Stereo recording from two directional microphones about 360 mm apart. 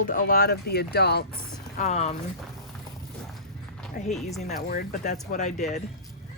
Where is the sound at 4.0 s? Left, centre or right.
Left.